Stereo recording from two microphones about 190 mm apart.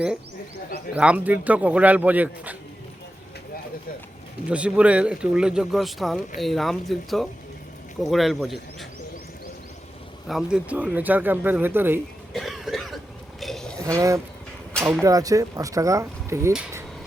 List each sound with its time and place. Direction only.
0.9 s speech: 5° right (ahead or behind)
4.4 s speech: 5° right (ahead or behind)
10.2 s speech: 5° right (ahead or behind)
12.3 s cough: centre (ahead or behind)
13.4 s a sound: centre (ahead or behind)
13.7 s speech: 15° right (ahead or behind)
14.7 s a sound: 5° left (ahead or behind)
15.0 s speech: 20° right (ahead or behind)